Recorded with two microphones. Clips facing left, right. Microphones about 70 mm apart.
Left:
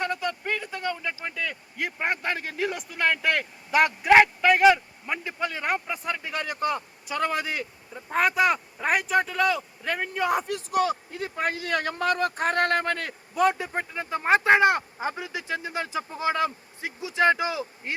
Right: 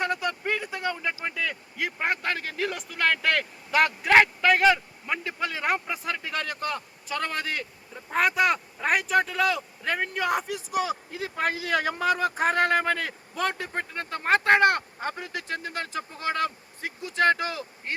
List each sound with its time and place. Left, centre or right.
0.0 s speech: centre